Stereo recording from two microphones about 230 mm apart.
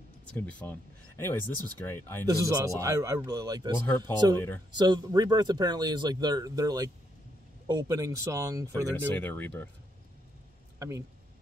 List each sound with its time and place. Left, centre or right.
0.3 s speech: centre
2.2 s speech: centre
8.9 s speech: centre
10.8 s speech: centre